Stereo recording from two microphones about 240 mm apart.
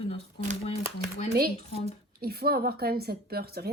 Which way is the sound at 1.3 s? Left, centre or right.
Right.